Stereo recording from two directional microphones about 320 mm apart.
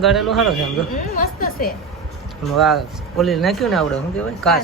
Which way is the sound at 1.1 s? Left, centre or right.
Left.